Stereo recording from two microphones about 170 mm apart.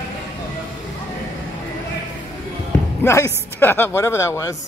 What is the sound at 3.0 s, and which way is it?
Speech, 15° left (ahead or behind).